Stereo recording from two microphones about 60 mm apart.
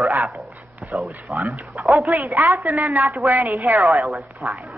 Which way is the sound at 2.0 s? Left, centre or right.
Right.